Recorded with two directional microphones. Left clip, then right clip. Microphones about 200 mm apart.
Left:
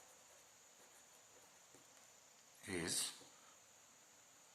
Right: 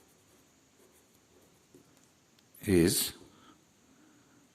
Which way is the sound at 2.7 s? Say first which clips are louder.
Right 17 dB; 50° right (ahead or behind).